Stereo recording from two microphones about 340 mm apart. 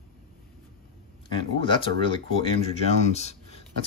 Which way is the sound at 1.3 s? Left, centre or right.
Centre.